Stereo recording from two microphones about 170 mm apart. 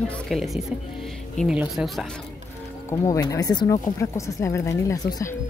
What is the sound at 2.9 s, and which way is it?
Speech, 20° left (ahead or behind).